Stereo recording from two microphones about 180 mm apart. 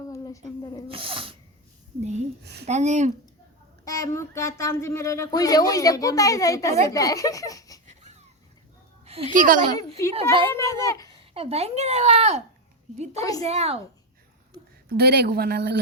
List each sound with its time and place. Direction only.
0.6 s speech: 20° left (ahead or behind)
0.9 s sneeze: 30° right (ahead or behind)
2.0 s speech: 40° right (ahead or behind)
2.4 s a woman's voice: 70° right (ahead or behind)
2.6 s speech: 40° right (ahead or behind)
3.8 s speech: 20° left (ahead or behind)
9.3 s a child's voice: 45° right (ahead or behind)
10.2 s a woman's voice: 30° right (ahead or behind)
10.5 s speech: 15° left (ahead or behind)
11.3 s speech: 35° right (ahead or behind)
13.1 s speech: 20° left (ahead or behind)
13.4 s speech: 35° right (ahead or behind)
14.8 s speech: 60° right (ahead or behind)